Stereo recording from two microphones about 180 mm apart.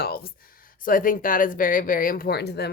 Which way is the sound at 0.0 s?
55° left (ahead or behind).